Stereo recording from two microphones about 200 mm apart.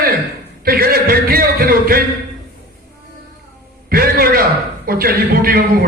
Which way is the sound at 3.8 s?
50° right (ahead or behind).